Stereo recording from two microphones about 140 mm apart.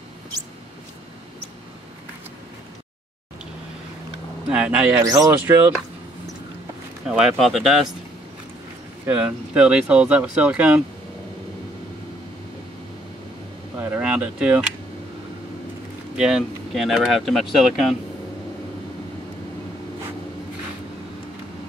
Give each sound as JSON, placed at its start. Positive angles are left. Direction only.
{"t": 4.5, "sound": "speech", "side_deg": -10}
{"t": 5.0, "sound": "speech", "side_deg": -25}
{"t": 7.1, "sound": "speech", "side_deg": -5}
{"t": 9.0, "sound": "speech", "side_deg": -10}
{"t": 13.7, "sound": "a sound", "side_deg": -10}
{"t": 16.2, "sound": "speech", "side_deg": -5}